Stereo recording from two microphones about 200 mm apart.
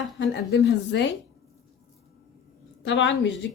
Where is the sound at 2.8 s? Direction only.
65° left (ahead or behind).